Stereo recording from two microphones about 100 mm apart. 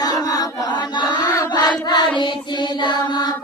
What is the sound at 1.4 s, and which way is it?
Music, 45° left (ahead or behind).